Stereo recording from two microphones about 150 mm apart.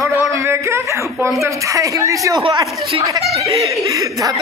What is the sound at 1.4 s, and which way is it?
Speech, 20° right (ahead or behind).